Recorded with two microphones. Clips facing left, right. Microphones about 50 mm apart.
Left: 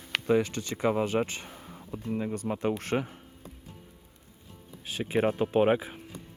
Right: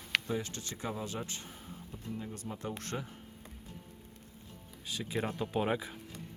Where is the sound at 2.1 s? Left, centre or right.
Left.